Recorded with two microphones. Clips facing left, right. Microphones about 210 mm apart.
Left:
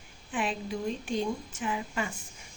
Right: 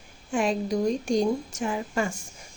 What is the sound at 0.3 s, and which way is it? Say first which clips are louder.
A woman's voice: right 7 dB; 45° right (ahead or behind).